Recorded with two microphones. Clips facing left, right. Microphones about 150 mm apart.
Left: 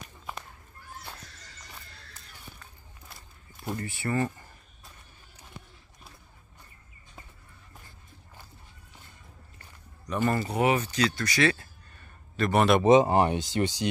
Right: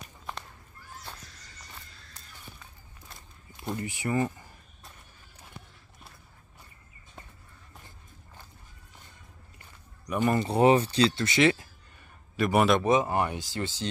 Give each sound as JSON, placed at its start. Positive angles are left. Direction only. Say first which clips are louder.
{"t": 3.7, "sound": "speech", "louder": "right 1 dB", "side_deg": -15}
{"t": 9.6, "sound": "a sound", "louder": "left 1 dB", "side_deg": -15}
{"t": 10.5, "sound": "speech", "louder": "right 4 dB", "side_deg": -30}
{"t": 12.4, "sound": "speech", "louder": "even", "side_deg": -10}
{"t": 12.8, "sound": "speech", "louder": "left 5 dB", "side_deg": 25}